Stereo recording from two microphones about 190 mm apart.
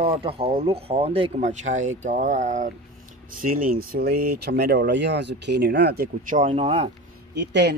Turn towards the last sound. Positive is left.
turn(degrees=-65)  # may be behind; listen again after turning